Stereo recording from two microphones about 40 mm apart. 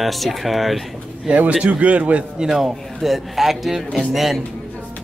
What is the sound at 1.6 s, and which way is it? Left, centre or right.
Speech, right.